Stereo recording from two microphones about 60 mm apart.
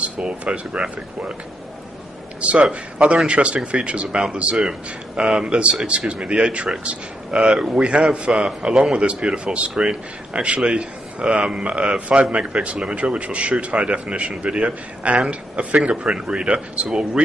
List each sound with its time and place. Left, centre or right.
0.0 s speech: centre
2.4 s a man's voice: centre